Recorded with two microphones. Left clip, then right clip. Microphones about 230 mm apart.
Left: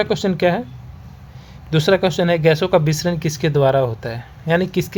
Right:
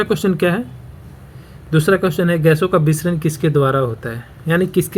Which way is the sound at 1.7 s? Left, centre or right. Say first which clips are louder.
Even; centre.